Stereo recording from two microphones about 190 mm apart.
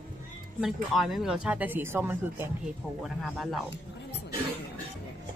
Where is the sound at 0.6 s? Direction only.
Centre (ahead or behind).